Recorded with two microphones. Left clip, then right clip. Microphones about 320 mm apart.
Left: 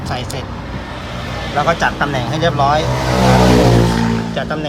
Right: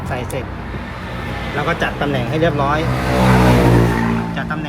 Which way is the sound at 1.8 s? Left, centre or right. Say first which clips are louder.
Left 3 dB; left.